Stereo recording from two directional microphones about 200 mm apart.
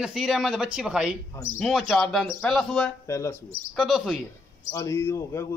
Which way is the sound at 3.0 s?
15° left (ahead or behind).